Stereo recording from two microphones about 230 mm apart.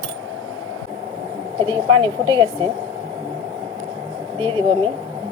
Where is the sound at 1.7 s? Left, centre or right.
Centre.